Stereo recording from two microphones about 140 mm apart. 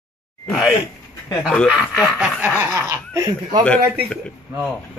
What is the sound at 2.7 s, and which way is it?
Speech, 20° right (ahead or behind).